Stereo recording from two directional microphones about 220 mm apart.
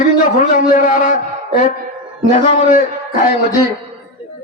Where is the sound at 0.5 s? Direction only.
35° left (ahead or behind).